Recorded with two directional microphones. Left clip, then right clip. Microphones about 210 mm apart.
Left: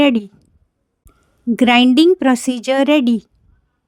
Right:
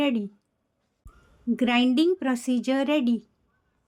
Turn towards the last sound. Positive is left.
turn(degrees=45)  # may be behind; listen again after turning